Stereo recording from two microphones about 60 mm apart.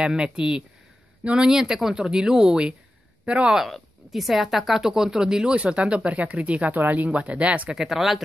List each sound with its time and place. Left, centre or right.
0.0 s a woman's voice: centre
3.5 s a woman's voice: centre; by 7.7 s right
7.7 s speech: centre